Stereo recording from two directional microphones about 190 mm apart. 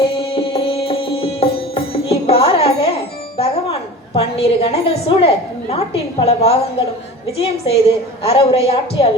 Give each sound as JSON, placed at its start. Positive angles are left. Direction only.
{"t": 0.0, "sound": "music", "side_deg": 30}
{"t": 3.3, "sound": "a woman's voice", "side_deg": 30}